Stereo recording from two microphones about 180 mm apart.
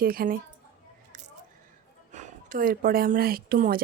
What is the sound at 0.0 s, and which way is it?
Speech, 55° right (ahead or behind).